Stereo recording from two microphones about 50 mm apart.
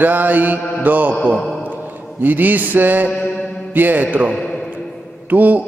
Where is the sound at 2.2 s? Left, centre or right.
Right.